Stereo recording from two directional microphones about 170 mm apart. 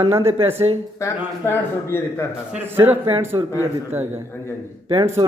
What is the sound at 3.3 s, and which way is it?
Speech, 30° right (ahead or behind).